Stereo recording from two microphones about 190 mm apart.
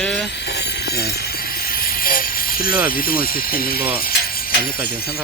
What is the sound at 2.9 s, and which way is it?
Speech, 50° left (ahead or behind).